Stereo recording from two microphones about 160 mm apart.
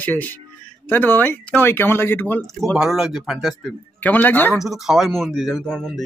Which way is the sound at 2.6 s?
Centre (ahead or behind).